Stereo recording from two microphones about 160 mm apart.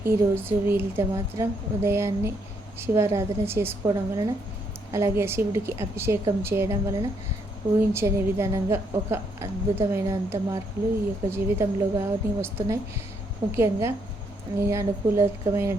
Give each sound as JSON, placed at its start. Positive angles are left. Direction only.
{"t": 0.0, "sound": "a woman's voice", "side_deg": -15}